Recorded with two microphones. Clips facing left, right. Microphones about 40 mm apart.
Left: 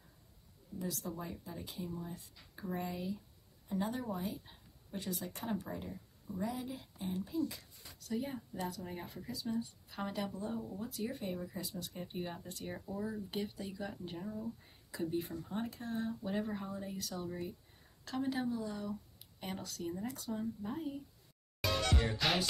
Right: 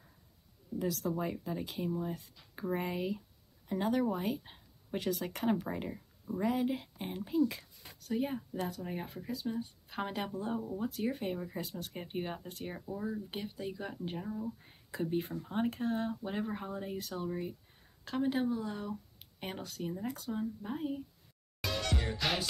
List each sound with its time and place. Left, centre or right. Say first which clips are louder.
0.7 s speech: right 7 dB; right
3.6 s a woman's voice: right 6 dB; right
12.8 s speech: right 3 dB; centre
13.3 s speech: right 1 dB; right
14.6 s speech: right 2 dB; right
16.2 s speech: right 1 dB; right
16.6 s speech: right 3 dB; right
17.3 s speech: right 4 dB; right
18.6 s speech: right 2 dB; right
21.5 s music: left 1 dB; centre